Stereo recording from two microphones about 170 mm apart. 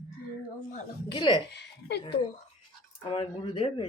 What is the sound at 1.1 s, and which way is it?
Speech, 30° left (ahead or behind).